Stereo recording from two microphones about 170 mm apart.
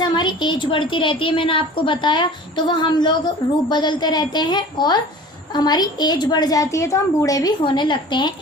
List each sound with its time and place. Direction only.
0.0 s a woman's voice: 25° left (ahead or behind)